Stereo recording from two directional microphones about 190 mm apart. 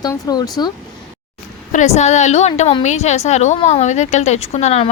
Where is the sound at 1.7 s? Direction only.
35° left (ahead or behind).